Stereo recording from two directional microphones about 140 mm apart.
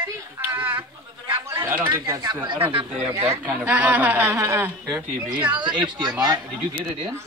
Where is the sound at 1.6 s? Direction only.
15° right (ahead or behind).